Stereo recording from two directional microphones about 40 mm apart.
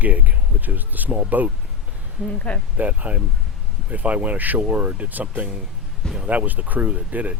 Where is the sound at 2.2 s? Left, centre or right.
Left.